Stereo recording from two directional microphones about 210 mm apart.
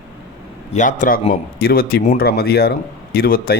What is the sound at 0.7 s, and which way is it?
Speech, 35° left (ahead or behind).